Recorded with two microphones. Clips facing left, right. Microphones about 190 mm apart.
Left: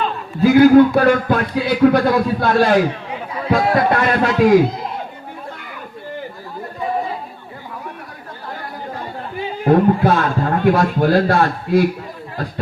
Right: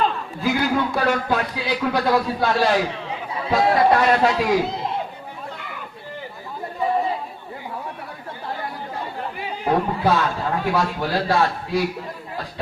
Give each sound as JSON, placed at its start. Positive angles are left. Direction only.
{"t": 0.4, "sound": "a man's voice", "side_deg": 50}
{"t": 9.6, "sound": "a man's voice", "side_deg": 50}